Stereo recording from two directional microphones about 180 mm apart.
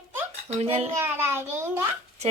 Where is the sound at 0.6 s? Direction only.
35° right (ahead or behind).